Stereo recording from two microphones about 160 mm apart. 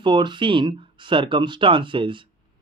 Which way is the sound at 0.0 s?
30° right (ahead or behind).